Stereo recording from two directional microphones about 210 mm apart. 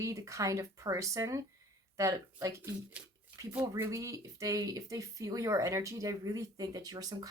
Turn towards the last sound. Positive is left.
turn(degrees=-15)  # may be behind; listen again after turning